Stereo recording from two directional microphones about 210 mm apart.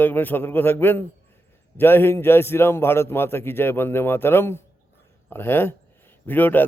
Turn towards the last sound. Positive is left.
turn(degrees=10)  # may be behind; listen again after turning